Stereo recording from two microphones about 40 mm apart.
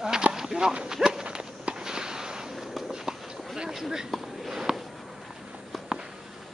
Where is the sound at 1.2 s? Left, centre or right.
Right.